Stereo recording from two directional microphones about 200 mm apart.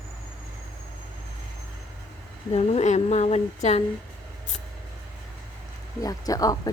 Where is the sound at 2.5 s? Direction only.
35° left (ahead or behind).